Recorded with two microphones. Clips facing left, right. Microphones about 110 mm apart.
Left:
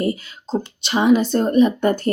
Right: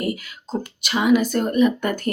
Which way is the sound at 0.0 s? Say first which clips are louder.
Left 4 dB; 30° left (ahead or behind).